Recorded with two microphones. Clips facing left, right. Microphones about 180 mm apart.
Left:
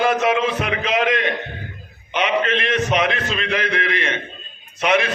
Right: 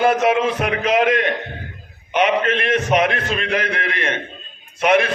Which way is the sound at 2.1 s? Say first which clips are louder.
Right 2 dB; 50° right (ahead or behind).